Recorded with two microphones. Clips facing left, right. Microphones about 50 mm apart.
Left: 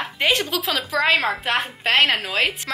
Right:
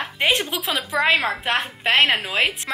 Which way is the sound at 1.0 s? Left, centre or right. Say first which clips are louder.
Even; centre.